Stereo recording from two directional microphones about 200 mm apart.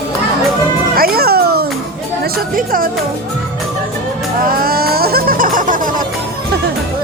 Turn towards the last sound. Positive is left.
turn(degrees=-40)  # may be behind; listen again after turning